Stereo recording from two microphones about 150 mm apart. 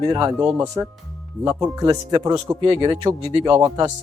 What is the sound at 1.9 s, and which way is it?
Speech, 25° right (ahead or behind).